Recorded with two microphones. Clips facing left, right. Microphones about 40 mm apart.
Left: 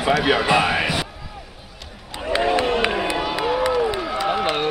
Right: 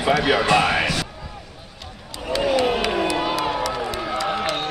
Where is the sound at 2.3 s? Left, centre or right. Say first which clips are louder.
Even; centre.